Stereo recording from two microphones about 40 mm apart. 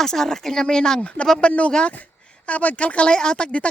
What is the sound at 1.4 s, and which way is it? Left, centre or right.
A woman's voice, left.